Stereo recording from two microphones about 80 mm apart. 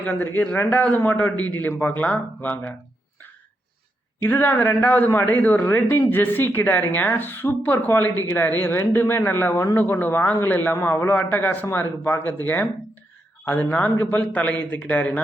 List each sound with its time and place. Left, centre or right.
0.0 s a man's voice: left
4.2 s a man's voice: left